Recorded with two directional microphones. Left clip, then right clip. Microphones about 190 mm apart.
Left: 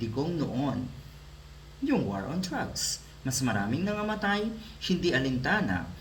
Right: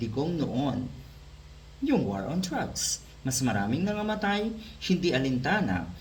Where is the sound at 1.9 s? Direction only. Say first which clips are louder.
Right 2 dB; 15° right (ahead or behind).